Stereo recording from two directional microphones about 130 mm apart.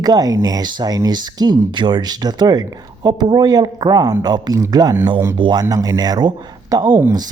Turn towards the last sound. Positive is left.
turn(degrees=-25)  # may be behind; listen again after turning